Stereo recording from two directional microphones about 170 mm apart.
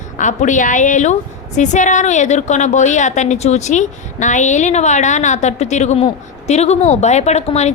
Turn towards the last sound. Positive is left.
turn(degrees=40)  # may be behind; listen again after turning